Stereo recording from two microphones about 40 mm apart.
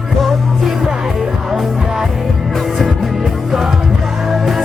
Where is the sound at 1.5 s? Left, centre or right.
Centre.